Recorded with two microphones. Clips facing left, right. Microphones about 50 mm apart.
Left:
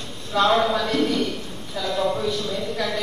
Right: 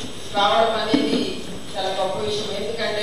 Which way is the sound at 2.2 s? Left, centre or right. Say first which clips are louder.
Even; left.